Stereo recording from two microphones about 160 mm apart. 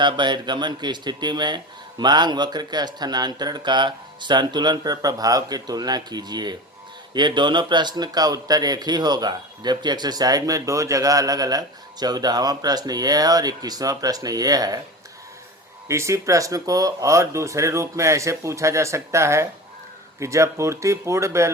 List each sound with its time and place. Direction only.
0.0 s speech: 30° right (ahead or behind)
15.9 s speech: 20° right (ahead or behind)